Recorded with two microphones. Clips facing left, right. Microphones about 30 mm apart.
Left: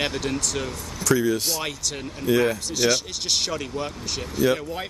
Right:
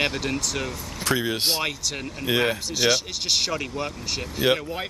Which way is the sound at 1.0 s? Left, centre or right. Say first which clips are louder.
Left 3 dB; right.